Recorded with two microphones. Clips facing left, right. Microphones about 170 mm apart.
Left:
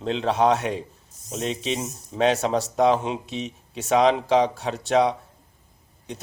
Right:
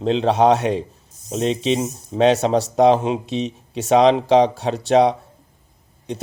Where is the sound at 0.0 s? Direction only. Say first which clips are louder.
Right 5 dB; 25° right (ahead or behind).